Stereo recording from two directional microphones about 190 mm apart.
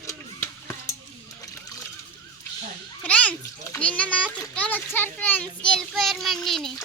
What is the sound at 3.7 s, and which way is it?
A child's voice, 5° left (ahead or behind).